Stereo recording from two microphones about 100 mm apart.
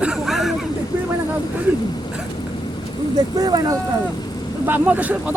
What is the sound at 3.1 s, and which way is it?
Speech, 45° right (ahead or behind).